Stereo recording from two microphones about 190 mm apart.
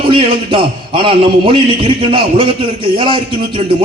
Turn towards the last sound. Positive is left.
turn(degrees=-25)  # may be behind; listen again after turning